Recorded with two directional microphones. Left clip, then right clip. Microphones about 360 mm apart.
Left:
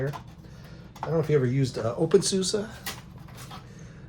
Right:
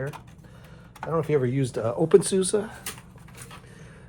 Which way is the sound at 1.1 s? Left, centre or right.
Centre.